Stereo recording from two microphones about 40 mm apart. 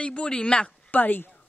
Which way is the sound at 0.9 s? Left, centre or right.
Left.